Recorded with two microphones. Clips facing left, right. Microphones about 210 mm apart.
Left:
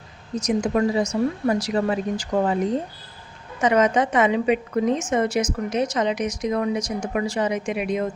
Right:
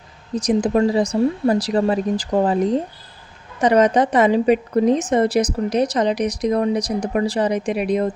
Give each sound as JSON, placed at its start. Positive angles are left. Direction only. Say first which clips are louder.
{"t": 0.3, "sound": "speech", "louder": "right 4 dB", "side_deg": -35}
{"t": 3.6, "sound": "speech", "louder": "right 4 dB", "side_deg": -35}